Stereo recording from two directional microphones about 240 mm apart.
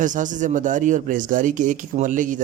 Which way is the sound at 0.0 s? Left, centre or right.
Right.